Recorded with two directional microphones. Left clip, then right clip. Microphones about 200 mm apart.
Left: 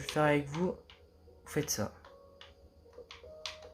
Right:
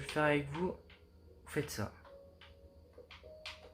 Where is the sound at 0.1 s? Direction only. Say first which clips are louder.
Left 3 dB; 25° left (ahead or behind).